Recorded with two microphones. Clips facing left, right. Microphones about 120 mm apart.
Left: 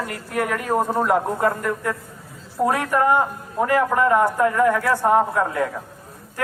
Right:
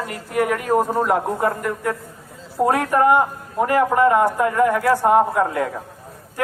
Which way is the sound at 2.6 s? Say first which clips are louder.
Right 3 dB; 25° right (ahead or behind).